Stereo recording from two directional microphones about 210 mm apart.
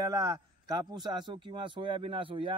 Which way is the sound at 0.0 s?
15° right (ahead or behind).